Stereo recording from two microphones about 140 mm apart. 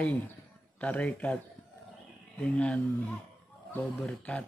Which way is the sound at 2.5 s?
10° left (ahead or behind).